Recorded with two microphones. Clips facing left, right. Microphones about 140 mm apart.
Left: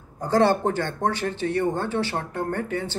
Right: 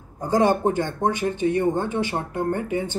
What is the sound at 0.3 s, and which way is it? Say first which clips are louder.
A man's voice: right 1 dB; 15° right (ahead or behind).